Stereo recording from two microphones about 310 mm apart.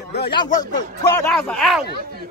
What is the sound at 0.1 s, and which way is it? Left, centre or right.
Speech, left.